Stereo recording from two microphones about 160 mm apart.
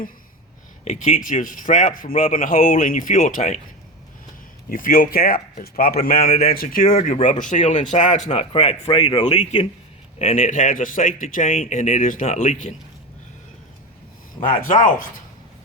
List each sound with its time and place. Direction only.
0.9 s speech: 50° left (ahead or behind)
4.7 s speech: 60° left (ahead or behind)
14.6 s speech: 55° left (ahead or behind)